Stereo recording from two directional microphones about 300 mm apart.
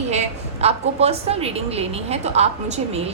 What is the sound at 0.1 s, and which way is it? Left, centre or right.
A woman's voice, right.